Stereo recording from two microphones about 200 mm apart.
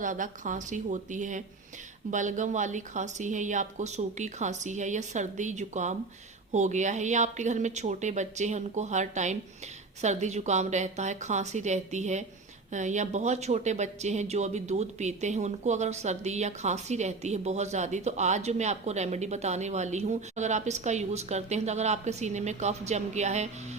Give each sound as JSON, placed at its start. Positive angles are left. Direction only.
{"t": 0.0, "sound": "speech", "side_deg": -40}